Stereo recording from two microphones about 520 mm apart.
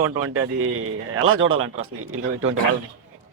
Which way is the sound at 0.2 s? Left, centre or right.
Right.